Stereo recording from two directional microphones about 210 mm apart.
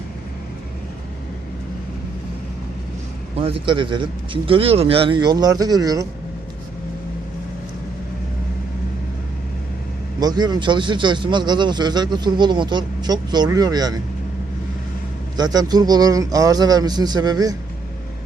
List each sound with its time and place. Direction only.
3.4 s speech: 25° right (ahead or behind)
10.2 s speech: 20° right (ahead or behind)
15.4 s speech: 20° right (ahead or behind)